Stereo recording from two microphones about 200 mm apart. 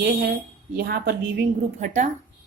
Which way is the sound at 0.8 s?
55° right (ahead or behind).